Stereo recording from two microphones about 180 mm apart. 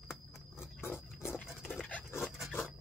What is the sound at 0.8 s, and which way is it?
Wild animals, 15° left (ahead or behind).